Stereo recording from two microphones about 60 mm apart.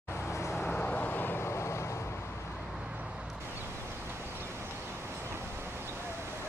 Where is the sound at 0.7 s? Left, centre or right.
Left.